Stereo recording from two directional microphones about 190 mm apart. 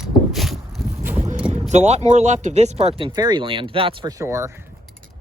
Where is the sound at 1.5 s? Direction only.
35° right (ahead or behind).